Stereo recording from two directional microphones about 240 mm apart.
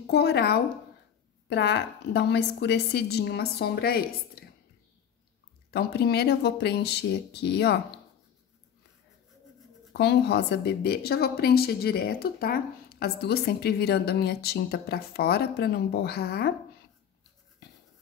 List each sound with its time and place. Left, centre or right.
0.0 s a woman's voice: left
5.7 s a woman's voice: left
9.9 s a woman's voice: left